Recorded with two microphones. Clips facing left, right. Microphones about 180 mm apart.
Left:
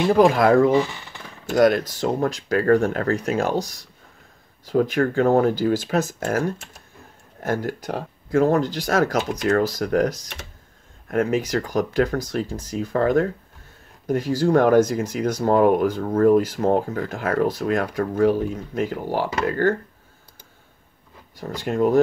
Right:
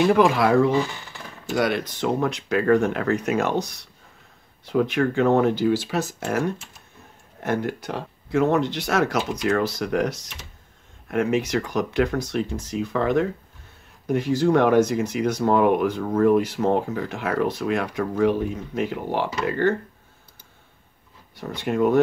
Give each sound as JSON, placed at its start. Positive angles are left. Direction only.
{"t": 0.0, "sound": "speech", "side_deg": 30}
{"t": 0.3, "sound": "speech", "side_deg": 50}
{"t": 4.6, "sound": "speech", "side_deg": 40}
{"t": 7.6, "sound": "speech", "side_deg": 45}
{"t": 11.3, "sound": "speech", "side_deg": 40}
{"t": 21.4, "sound": "speech", "side_deg": 40}